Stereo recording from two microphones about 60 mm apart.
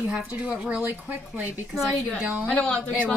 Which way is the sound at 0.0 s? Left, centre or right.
Right.